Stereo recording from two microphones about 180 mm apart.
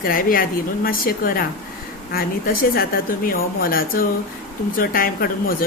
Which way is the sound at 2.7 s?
55° left (ahead or behind).